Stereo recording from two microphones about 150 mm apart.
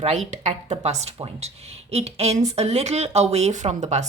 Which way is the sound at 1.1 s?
35° right (ahead or behind).